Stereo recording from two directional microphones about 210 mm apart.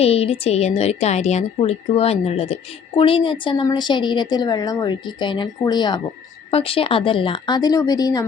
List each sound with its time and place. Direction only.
0.0 s a woman's voice: 30° left (ahead or behind)